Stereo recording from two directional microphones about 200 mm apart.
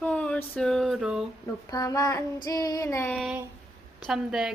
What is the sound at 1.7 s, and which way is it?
Child singing, 20° left (ahead or behind).